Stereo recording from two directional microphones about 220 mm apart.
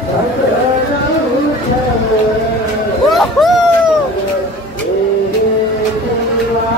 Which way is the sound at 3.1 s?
Centre (ahead or behind).